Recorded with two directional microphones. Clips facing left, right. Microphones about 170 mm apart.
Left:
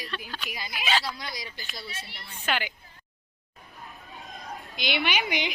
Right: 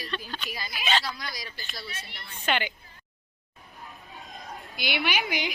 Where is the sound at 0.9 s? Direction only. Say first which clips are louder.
Even; 5° left (ahead or behind).